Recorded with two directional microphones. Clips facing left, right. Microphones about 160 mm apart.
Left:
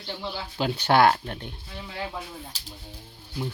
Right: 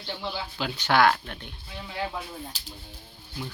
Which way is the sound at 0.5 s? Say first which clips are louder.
Left 3 dB; 40° left (ahead or behind).